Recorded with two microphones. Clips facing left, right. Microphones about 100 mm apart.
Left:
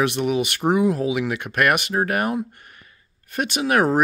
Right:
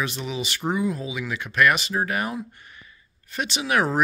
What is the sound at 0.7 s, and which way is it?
Speech, 75° left (ahead or behind).